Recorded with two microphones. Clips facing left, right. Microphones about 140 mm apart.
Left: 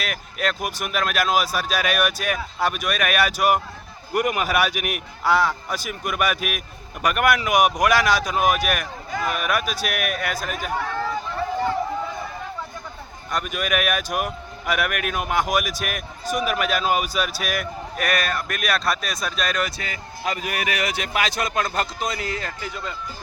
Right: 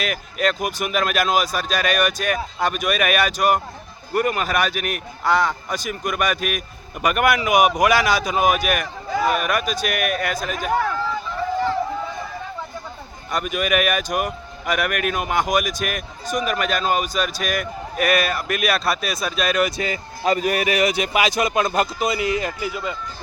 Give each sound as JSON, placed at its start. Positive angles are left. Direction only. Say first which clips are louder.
{"t": 0.0, "sound": "a man's voice", "louder": "right 4 dB", "side_deg": 0}
{"t": 13.3, "sound": "a man's voice", "louder": "right 3 dB", "side_deg": 0}
{"t": 20.2, "sound": "speech", "louder": "right 7 dB", "side_deg": -35}
{"t": 20.7, "sound": "speech", "louder": "right 6 dB", "side_deg": -20}